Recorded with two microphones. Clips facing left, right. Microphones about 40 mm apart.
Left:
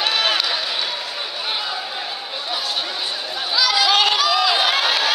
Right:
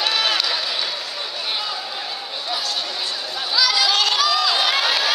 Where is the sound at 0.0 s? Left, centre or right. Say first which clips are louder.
Left 1 dB; centre.